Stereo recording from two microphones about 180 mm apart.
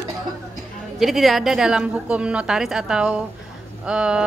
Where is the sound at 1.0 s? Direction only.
Centre (ahead or behind).